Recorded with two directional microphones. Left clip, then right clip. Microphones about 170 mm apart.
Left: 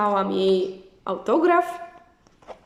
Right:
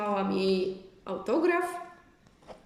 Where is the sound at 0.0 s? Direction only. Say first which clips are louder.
Left 8 dB; 10° right (ahead or behind).